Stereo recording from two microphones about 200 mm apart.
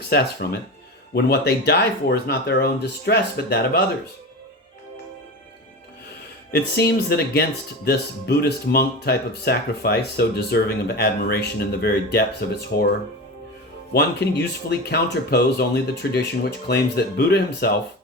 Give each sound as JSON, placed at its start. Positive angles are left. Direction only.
{"t": 0.4, "sound": "speech", "side_deg": 50}
{"t": 6.5, "sound": "speech", "side_deg": 55}
{"t": 13.9, "sound": "speech", "side_deg": 55}